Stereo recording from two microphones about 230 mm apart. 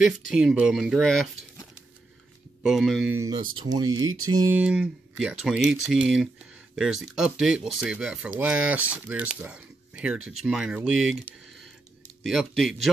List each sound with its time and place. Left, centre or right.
0.3 s speech: centre
2.6 s speech: centre
3.6 s speech: centre